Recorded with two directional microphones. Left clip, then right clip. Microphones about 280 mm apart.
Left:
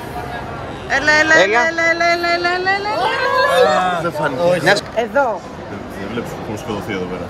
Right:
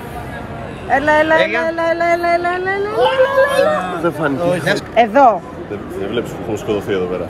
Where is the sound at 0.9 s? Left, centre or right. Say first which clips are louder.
Even; centre.